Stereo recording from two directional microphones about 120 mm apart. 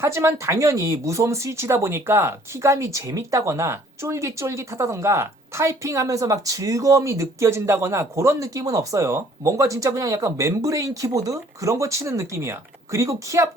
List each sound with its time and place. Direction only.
0.0 s speech: 25° right (ahead or behind)